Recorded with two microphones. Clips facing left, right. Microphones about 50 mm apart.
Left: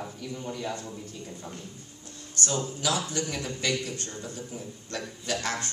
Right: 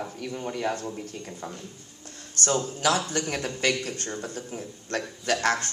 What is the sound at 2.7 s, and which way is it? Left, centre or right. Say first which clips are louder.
A man's voice: right 5 dB; right.